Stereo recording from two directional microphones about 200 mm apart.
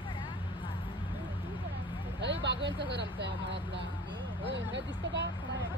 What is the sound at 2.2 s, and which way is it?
Speech, 60° right (ahead or behind).